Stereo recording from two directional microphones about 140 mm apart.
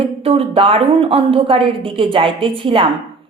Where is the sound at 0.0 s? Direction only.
45° right (ahead or behind).